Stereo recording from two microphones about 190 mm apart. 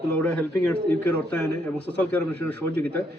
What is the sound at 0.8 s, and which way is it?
Speech, 60° right (ahead or behind).